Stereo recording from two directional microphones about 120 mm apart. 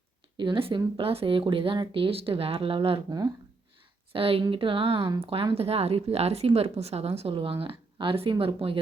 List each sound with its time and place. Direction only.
0.3 s speech: 45° right (ahead or behind)
4.1 s speech: 50° right (ahead or behind)